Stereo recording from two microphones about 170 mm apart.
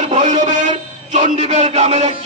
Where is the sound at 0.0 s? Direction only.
45° right (ahead or behind).